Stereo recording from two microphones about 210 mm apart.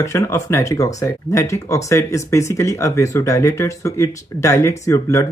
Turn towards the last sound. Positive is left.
turn(degrees=15)  # may be behind; listen again after turning